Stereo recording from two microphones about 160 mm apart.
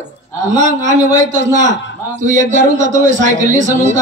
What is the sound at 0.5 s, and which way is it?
Speech, 45° right (ahead or behind).